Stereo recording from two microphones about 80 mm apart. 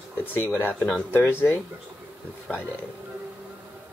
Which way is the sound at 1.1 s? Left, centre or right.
Left.